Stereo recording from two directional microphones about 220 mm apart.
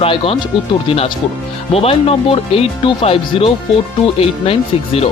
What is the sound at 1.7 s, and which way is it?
Speech, 25° left (ahead or behind).